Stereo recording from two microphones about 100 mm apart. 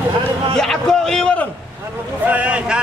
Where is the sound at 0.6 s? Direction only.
5° left (ahead or behind).